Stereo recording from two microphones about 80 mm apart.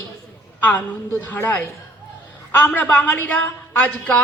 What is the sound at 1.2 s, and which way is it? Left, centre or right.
A woman's voice, left.